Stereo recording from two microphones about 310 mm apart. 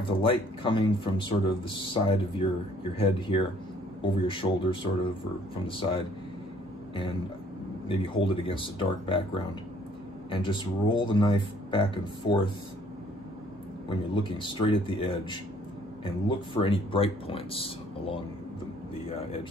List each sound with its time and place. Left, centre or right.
0.0 s speech: centre
7.9 s speech: centre
14.4 s speech: centre
16.3 s speech: centre